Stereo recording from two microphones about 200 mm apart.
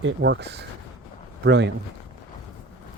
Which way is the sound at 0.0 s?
60° right (ahead or behind).